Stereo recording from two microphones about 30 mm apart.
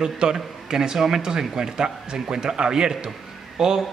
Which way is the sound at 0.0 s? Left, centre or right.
Right.